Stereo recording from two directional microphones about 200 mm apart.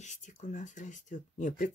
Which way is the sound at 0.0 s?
35° left (ahead or behind).